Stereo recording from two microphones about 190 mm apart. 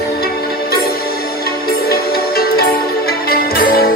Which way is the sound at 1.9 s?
55° left (ahead or behind).